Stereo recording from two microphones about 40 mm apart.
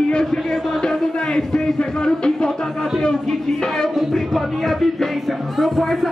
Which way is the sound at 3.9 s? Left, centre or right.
Centre.